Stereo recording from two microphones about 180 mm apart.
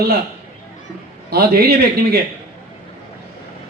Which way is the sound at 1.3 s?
60° right (ahead or behind).